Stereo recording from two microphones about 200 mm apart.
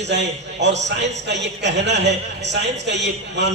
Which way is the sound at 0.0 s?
60° right (ahead or behind).